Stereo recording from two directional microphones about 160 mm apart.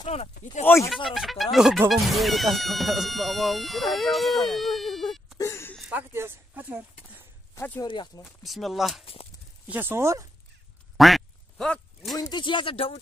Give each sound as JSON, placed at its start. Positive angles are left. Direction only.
{"t": 0.0, "sound": "speech", "side_deg": 40}
{"t": 0.8, "sound": "speech", "side_deg": 0}
{"t": 5.4, "sound": "a sound", "side_deg": 15}
{"t": 5.8, "sound": "a sound", "side_deg": -10}
{"t": 7.5, "sound": "speech", "side_deg": 10}
{"t": 7.8, "sound": "speech", "side_deg": 30}
{"t": 8.5, "sound": "speech", "side_deg": 0}
{"t": 9.0, "sound": "speech", "side_deg": 35}
{"t": 9.7, "sound": "speech", "side_deg": -10}
{"t": 11.0, "sound": "quack", "side_deg": 0}
{"t": 12.2, "sound": "speech", "side_deg": 30}